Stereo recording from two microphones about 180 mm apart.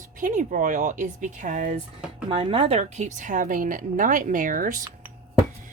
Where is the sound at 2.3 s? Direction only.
30° right (ahead or behind); by 4.8 s 50° right (ahead or behind).